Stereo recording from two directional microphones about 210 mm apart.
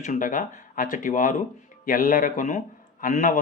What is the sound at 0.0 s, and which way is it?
Speech, 35° left (ahead or behind).